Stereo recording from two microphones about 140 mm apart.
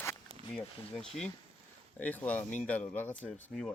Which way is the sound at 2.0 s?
10° left (ahead or behind).